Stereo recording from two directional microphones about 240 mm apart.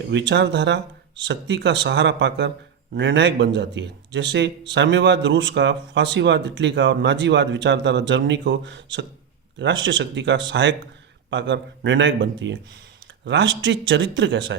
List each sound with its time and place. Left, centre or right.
0.1 s speech: right